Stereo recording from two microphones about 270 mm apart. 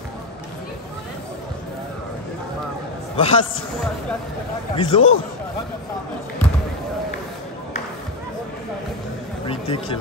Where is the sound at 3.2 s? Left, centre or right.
Centre.